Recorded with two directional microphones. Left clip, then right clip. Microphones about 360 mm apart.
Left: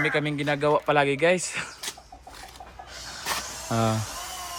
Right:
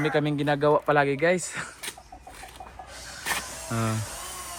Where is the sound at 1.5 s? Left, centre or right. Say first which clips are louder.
Left 2 dB; centre.